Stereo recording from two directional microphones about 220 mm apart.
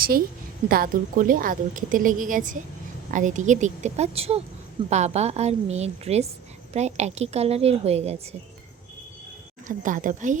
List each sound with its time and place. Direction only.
0.0 s a woman's voice: 40° right (ahead or behind)
9.6 s a woman's voice: 35° right (ahead or behind)